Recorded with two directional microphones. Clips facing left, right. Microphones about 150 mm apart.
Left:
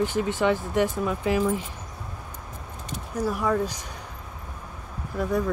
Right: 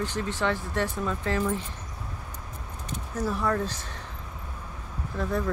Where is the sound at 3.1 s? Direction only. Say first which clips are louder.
Left 3 dB; 10° left (ahead or behind).